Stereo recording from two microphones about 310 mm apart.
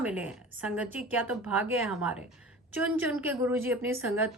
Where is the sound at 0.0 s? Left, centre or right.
Centre.